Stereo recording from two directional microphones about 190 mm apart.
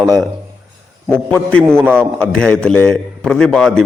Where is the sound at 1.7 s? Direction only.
5° left (ahead or behind).